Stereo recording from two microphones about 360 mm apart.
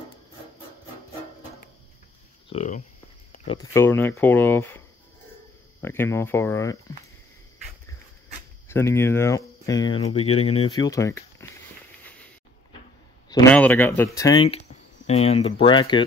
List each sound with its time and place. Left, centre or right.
2.5 s speech: centre
8.6 s speech: centre
12.0 s a sound: centre
13.3 s speech: centre